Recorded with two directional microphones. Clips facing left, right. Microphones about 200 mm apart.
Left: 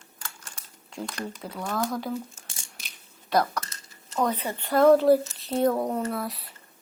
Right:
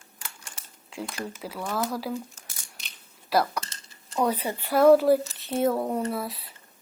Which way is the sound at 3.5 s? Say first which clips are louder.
Even; 30° right (ahead or behind).